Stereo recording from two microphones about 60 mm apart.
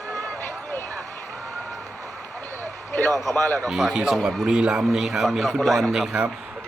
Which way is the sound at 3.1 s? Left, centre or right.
Centre.